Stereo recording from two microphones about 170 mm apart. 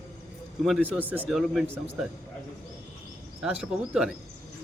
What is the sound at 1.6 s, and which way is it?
Speech, 15° right (ahead or behind).